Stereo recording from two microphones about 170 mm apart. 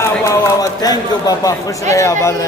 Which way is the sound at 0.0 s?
20° left (ahead or behind).